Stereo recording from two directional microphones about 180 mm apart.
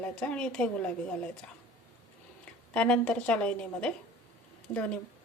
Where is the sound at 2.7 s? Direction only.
5° left (ahead or behind).